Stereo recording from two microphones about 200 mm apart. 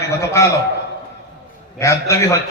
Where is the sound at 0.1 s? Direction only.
15° left (ahead or behind).